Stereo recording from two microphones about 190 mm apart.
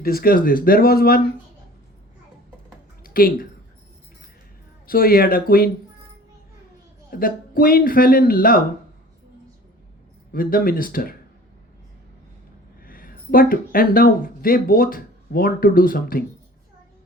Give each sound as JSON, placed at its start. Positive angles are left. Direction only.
{"t": 0.0, "sound": "speech", "side_deg": 50}
{"t": 3.0, "sound": "a sound", "side_deg": 50}
{"t": 4.9, "sound": "speech", "side_deg": 50}
{"t": 7.1, "sound": "speech", "side_deg": 50}
{"t": 10.3, "sound": "speech", "side_deg": 50}
{"t": 12.8, "sound": "speech", "side_deg": 50}